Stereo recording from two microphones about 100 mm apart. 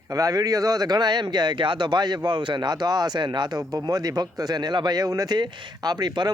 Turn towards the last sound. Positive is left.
turn(degrees=-45)  # may be behind; listen again after turning